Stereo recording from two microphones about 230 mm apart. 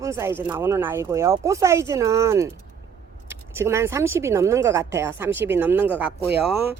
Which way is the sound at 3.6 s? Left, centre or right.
Centre.